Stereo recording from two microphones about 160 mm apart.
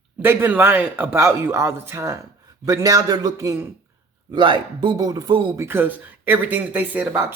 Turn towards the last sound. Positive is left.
turn(degrees=-10)  # may be behind; listen again after turning